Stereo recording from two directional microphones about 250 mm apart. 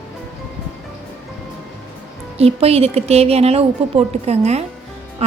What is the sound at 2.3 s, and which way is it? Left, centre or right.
A woman's voice, right.